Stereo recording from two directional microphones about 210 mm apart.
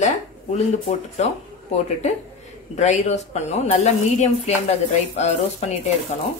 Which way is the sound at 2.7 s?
35° left (ahead or behind).